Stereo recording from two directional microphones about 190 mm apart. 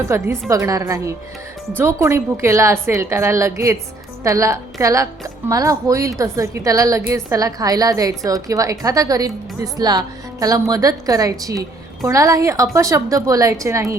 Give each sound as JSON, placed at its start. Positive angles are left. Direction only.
{"t": 0.1, "sound": "a woman's voice", "side_deg": -15}